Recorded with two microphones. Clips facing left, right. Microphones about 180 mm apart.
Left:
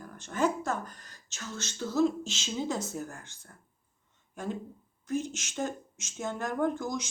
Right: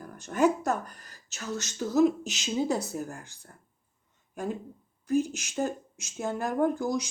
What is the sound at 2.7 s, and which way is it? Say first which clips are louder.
Speech: right 4 dB; 35° right (ahead or behind).